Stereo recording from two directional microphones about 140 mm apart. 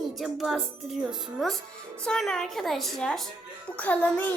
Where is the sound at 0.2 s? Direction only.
Centre (ahead or behind).